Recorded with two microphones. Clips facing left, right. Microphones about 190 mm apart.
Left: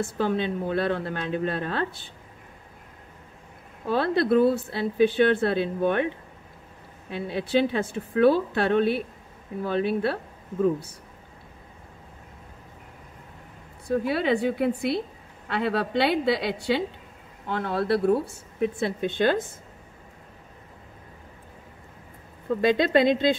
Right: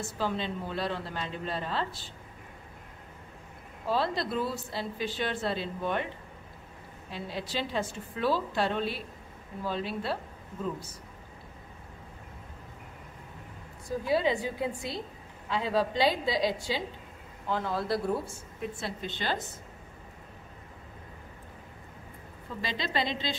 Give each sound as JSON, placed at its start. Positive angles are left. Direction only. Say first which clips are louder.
{"t": 0.0, "sound": "a woman's voice", "louder": "left 7 dB", "side_deg": 60}
{"t": 3.8, "sound": "a woman's voice", "louder": "left 6 dB", "side_deg": 60}
{"t": 7.1, "sound": "a woman's voice", "louder": "left 9 dB", "side_deg": 60}
{"t": 13.8, "sound": "a woman's voice", "louder": "left 4 dB", "side_deg": 65}
{"t": 22.5, "sound": "speech", "louder": "left 14 dB", "side_deg": 55}